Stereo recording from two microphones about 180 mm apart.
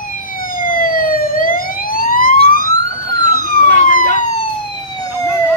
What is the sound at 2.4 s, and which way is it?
Emergency vehicle, 50° right (ahead or behind).